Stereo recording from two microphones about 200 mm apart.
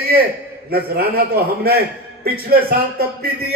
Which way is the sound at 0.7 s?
50° right (ahead or behind).